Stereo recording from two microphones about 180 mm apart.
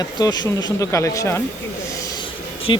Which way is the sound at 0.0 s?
20° left (ahead or behind).